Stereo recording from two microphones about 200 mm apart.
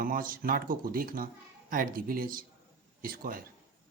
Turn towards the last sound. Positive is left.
turn(degrees=-45)  # may be behind; listen again after turning